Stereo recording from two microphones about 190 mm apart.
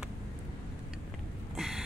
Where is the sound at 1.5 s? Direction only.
Centre (ahead or behind).